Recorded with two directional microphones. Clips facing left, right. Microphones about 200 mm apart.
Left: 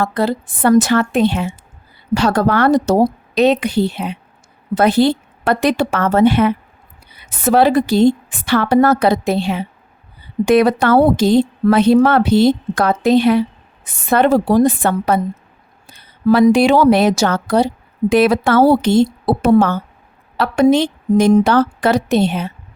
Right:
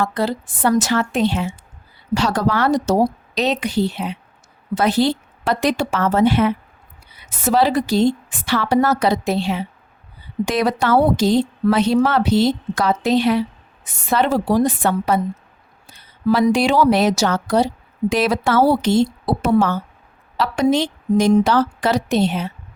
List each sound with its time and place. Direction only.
0.0 s a woman's voice: 55° left (ahead or behind)